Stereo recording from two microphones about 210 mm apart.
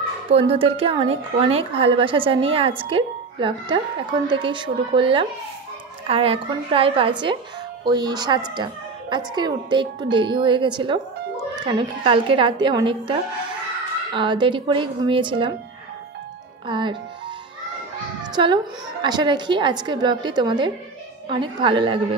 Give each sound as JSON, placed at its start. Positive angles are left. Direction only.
{"t": 0.3, "sound": "a woman's voice", "side_deg": -25}
{"t": 16.6, "sound": "a woman's voice", "side_deg": -20}
{"t": 18.3, "sound": "a woman's voice", "side_deg": -20}